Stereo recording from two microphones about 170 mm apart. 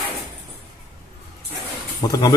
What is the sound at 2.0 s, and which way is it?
Speech, 25° left (ahead or behind).